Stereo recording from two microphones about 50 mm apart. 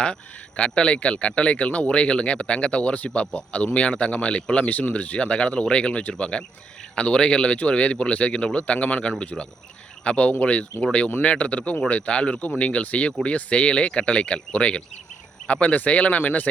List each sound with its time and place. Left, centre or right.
0.0 s speech: left